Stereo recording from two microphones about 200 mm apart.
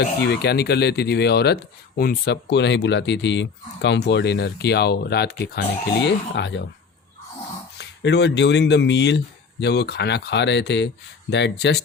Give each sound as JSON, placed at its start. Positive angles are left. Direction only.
{"t": 0.2, "sound": "speech", "side_deg": 55}
{"t": 7.8, "sound": "speech", "side_deg": 60}